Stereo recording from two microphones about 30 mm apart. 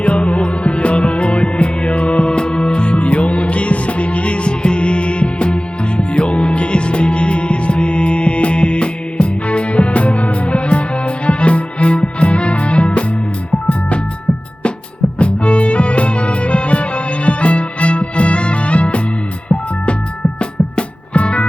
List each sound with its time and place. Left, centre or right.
0.0 s music: left
15.2 s music: left